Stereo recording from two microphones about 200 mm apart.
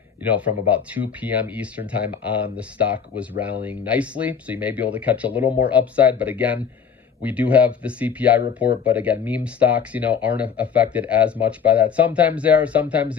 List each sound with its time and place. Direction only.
0.3 s speech: 5° right (ahead or behind)